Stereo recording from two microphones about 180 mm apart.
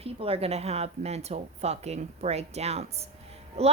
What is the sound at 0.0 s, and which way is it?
Speech, 30° right (ahead or behind).